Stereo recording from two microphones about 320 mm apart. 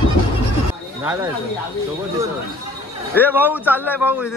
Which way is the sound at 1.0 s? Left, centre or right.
Centre.